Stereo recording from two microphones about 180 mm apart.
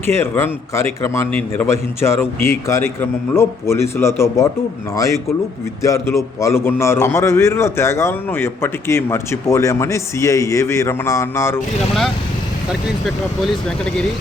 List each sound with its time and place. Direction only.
0.1 s a man's voice: 15° left (ahead or behind)
13.1 s speech: centre (ahead or behind)